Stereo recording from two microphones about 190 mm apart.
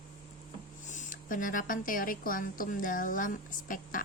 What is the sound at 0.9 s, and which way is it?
Speech, 40° left (ahead or behind).